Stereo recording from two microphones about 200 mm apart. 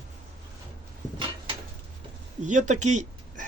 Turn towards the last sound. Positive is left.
turn(degrees=-35)  # may be behind; listen again after turning